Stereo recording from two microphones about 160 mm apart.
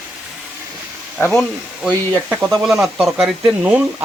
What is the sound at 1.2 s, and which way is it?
Speech, 10° left (ahead or behind).